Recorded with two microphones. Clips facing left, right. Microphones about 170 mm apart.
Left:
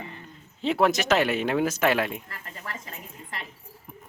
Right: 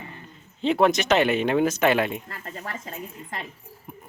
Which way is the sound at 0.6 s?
5° left (ahead or behind).